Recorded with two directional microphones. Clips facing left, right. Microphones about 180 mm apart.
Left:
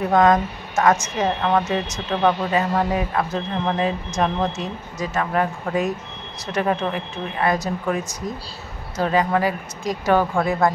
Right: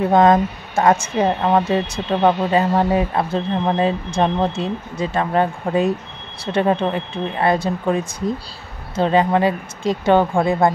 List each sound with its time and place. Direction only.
0.1 s speech: 30° right (ahead or behind)